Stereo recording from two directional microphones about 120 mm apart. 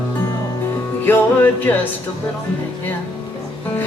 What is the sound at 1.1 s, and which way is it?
Music, 15° left (ahead or behind).